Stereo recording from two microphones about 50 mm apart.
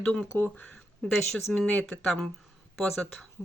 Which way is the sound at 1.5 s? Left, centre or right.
Left.